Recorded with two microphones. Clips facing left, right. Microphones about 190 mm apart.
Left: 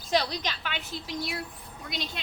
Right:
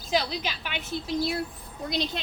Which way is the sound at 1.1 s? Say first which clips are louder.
Right 7 dB; 30° right (ahead or behind).